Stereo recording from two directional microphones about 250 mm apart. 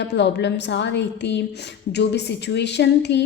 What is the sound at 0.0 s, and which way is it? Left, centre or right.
A woman's voice, left.